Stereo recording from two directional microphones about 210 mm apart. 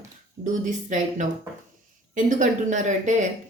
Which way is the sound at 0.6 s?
35° right (ahead or behind).